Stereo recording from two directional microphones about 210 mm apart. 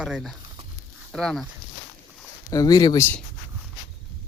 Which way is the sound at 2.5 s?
15° left (ahead or behind).